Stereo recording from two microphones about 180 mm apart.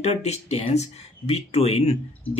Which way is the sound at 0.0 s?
35° left (ahead or behind).